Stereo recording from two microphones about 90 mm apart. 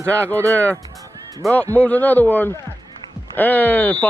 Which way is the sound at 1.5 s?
15° left (ahead or behind).